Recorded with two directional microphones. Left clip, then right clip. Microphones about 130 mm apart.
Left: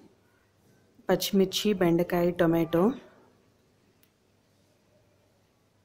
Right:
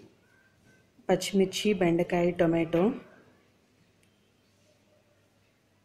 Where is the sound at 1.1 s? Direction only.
20° left (ahead or behind).